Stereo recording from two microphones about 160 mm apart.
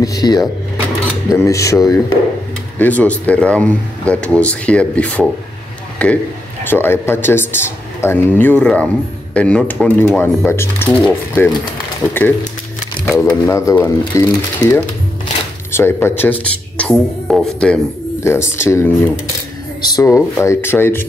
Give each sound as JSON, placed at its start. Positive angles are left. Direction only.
{"t": 0.0, "sound": "speech", "side_deg": 25}
{"t": 2.8, "sound": "speech", "side_deg": 10}
{"t": 15.7, "sound": "speech", "side_deg": 15}
{"t": 18.2, "sound": "speech", "side_deg": 15}